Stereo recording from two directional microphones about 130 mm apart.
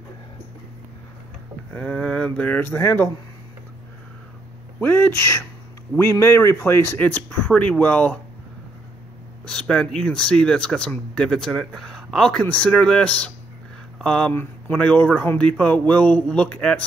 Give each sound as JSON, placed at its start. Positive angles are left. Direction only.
{"t": 1.7, "sound": "speech", "side_deg": 10}
{"t": 4.7, "sound": "speech", "side_deg": 15}
{"t": 9.5, "sound": "speech", "side_deg": 5}